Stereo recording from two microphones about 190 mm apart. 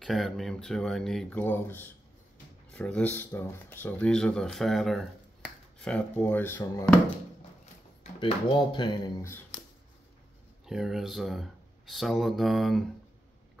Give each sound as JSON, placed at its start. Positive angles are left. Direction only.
{"t": 0.0, "sound": "speech", "side_deg": 0}
{"t": 8.0, "sound": "speech", "side_deg": 25}
{"t": 10.6, "sound": "speech", "side_deg": 0}